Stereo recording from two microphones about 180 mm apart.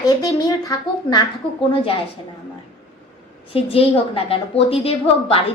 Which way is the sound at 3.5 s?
30° left (ahead or behind).